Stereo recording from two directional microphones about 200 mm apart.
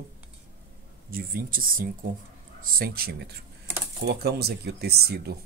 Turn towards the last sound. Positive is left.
turn(degrees=-55)  # may be behind; listen again after turning